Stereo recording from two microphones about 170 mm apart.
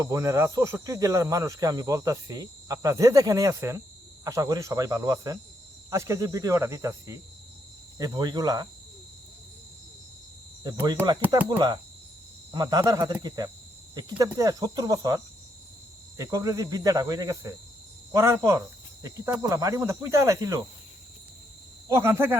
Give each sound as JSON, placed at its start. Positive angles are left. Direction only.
{"t": 0.0, "sound": "speech", "side_deg": -20}
{"t": 11.3, "sound": "speech", "side_deg": -20}
{"t": 21.8, "sound": "speech", "side_deg": -15}